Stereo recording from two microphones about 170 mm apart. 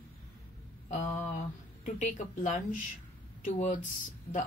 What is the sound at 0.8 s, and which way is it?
Mantra, 45° left (ahead or behind).